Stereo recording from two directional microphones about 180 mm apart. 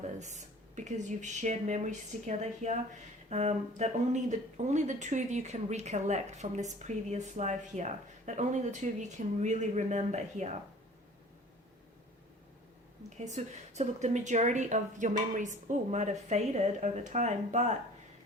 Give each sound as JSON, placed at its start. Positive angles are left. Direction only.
{"t": 0.2, "sound": "speech", "side_deg": -40}
{"t": 13.1, "sound": "speech", "side_deg": -40}